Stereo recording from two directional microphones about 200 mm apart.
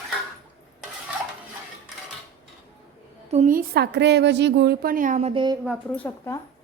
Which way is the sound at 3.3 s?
40° right (ahead or behind).